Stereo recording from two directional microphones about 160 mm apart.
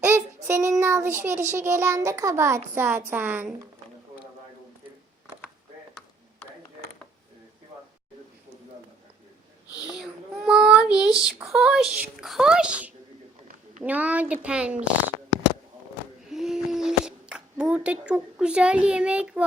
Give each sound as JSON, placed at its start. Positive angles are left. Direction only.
{"t": 0.4, "sound": "child singing", "side_deg": -15}
{"t": 1.5, "sound": "a child's voice", "side_deg": -15}
{"t": 9.9, "sound": "child singing", "side_deg": 0}
{"t": 13.8, "sound": "a child's voice", "side_deg": -10}
{"t": 16.3, "sound": "a sound", "side_deg": -5}